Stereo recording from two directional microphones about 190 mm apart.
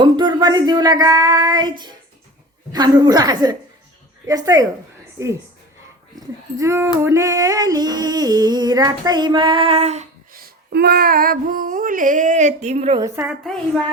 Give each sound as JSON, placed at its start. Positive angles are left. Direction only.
{"t": 0.0, "sound": "speech", "side_deg": -25}
{"t": 2.7, "sound": "a sound", "side_deg": -20}
{"t": 5.2, "sound": "a woman's voice", "side_deg": -15}
{"t": 6.1, "sound": "a sound", "side_deg": -15}
{"t": 10.3, "sound": "female singing", "side_deg": -55}
{"t": 13.0, "sound": "a woman's voice", "side_deg": -15}